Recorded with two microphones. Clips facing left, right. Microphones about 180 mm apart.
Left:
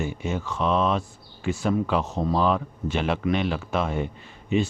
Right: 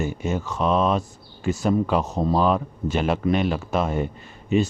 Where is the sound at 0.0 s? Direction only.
45° right (ahead or behind).